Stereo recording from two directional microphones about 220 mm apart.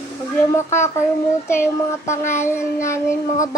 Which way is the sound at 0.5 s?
10° left (ahead or behind).